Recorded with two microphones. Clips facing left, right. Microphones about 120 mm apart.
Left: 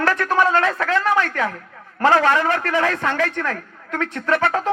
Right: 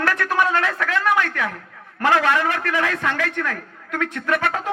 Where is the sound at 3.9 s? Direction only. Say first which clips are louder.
Left 2 dB; 30° left (ahead or behind).